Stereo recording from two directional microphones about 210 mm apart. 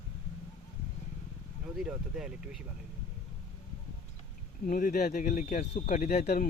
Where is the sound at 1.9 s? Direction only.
5° right (ahead or behind).